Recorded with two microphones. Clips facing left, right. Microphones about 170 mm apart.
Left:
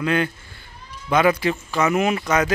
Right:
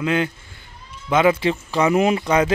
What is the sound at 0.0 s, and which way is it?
Speech, 20° right (ahead or behind).